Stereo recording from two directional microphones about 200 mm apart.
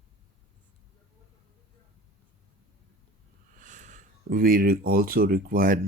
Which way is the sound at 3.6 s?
40° right (ahead or behind).